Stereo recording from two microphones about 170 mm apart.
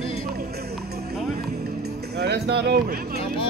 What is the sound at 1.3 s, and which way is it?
Music, 65° right (ahead or behind).